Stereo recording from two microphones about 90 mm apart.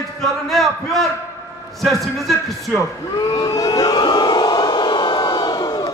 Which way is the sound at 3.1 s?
40° left (ahead or behind).